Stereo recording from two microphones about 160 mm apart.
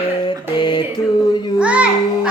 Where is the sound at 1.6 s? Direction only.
5° right (ahead or behind).